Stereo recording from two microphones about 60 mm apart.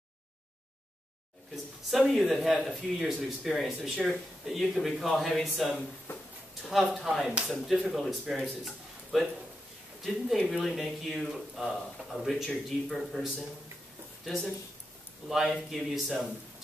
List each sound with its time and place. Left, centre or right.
1.9 s speech: centre
6.1 s a sound: left
6.6 s speech: centre
8.6 s a sound: centre
10.3 s speech: centre
12.6 s speech: centre
15.2 s speech: centre